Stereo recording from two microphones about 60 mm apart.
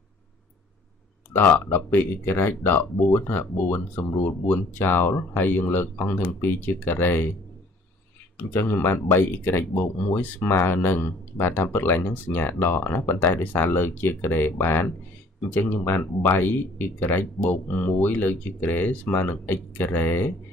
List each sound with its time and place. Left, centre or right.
1.9 s speech: left
8.5 s speech: left